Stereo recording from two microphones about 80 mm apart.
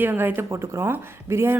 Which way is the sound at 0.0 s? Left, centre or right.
Right.